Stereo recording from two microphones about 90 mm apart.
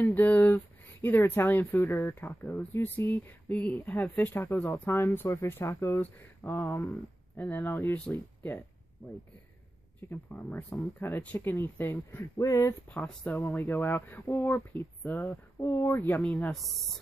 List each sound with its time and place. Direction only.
0.3 s speech: 20° left (ahead or behind)
7.6 s speech: 30° left (ahead or behind)
10.0 s speech: 25° left (ahead or behind)
12.4 s speech: 40° left (ahead or behind)
12.9 s speech: 15° left (ahead or behind)
16.2 s speech: 10° left (ahead or behind)
16.5 s speech: centre (ahead or behind)